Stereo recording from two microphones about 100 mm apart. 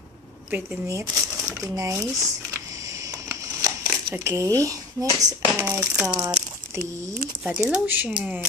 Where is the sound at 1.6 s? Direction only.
35° right (ahead or behind).